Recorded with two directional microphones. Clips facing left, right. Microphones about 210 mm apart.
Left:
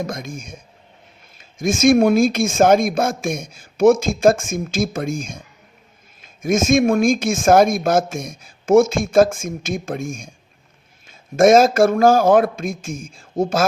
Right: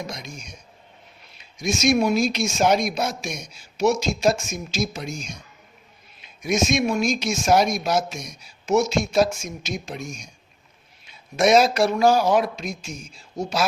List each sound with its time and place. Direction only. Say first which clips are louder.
0.0 s speech: left 7 dB; 50° left (ahead or behind)